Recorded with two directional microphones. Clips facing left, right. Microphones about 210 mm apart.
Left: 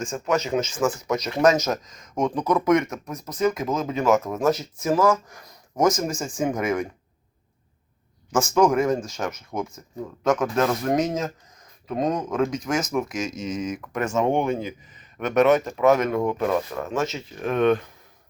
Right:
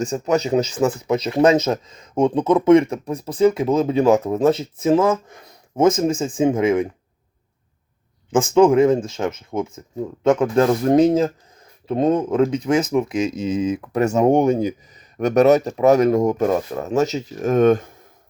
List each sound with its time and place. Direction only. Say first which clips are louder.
0.0 s speech: right 5 dB; 35° right (ahead or behind)
8.4 s speech: right 6 dB; 25° right (ahead or behind)
14.0 s speech: right 7 dB; 40° right (ahead or behind)